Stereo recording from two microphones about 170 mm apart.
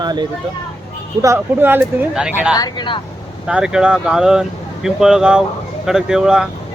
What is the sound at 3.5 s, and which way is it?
Speech, 5° right (ahead or behind).